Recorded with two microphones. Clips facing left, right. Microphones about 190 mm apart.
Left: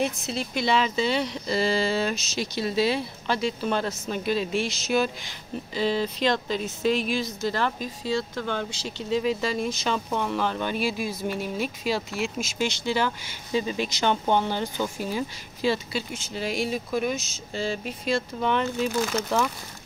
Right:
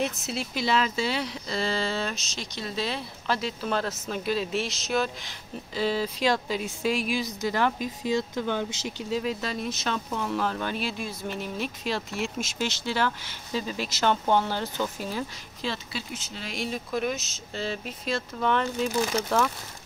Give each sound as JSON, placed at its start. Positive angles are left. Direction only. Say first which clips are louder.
{"t": 0.3, "sound": "speech", "louder": "left 1 dB", "side_deg": -5}
{"t": 9.1, "sound": "speech", "louder": "left 5 dB", "side_deg": 0}
{"t": 14.3, "sound": "speech", "louder": "left 1 dB", "side_deg": 20}
{"t": 14.8, "sound": "speech", "louder": "left 2 dB", "side_deg": 5}